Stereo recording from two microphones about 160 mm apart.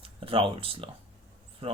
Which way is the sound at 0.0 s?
35° right (ahead or behind).